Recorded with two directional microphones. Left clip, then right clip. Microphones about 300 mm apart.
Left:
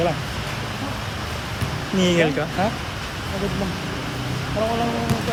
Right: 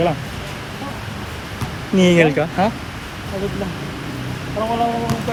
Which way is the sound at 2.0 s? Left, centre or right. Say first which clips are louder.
Right 5 dB; centre.